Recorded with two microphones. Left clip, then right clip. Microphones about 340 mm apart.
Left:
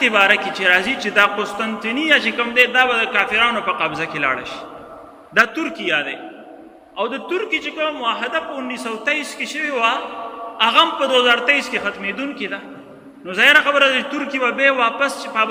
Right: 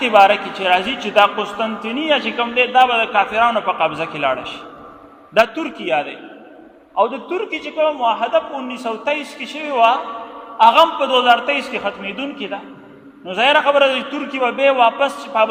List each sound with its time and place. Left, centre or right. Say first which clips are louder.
0.0 s a man's voice: right 3 dB; centre